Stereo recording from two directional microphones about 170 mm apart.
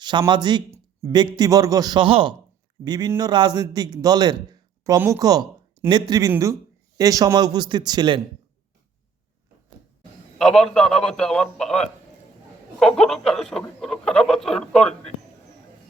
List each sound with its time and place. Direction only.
0.0 s speech: 25° right (ahead or behind)
10.3 s speech: 5° left (ahead or behind)